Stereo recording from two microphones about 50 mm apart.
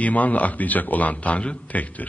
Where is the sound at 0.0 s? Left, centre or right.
Left.